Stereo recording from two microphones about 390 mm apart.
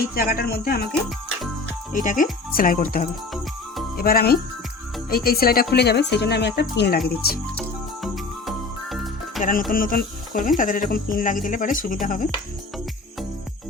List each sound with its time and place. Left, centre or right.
0.1 s speech: left
1.9 s speech: centre
8.0 s jingle bell: centre
9.4 s speech: left